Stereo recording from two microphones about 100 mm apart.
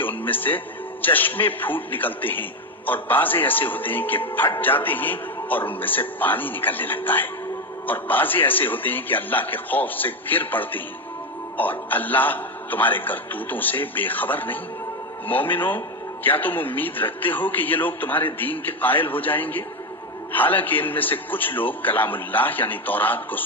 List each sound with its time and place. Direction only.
0.0 s music: 20° left (ahead or behind)
1.0 s a man's voice: 20° left (ahead or behind)